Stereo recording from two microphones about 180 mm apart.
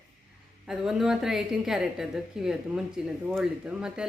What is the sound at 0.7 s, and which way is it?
A woman's voice, 5° right (ahead or behind).